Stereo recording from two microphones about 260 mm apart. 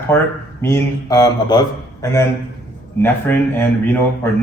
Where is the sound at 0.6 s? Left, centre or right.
Centre.